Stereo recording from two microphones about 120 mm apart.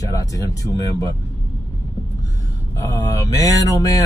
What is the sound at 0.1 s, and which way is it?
Speech, 30° left (ahead or behind).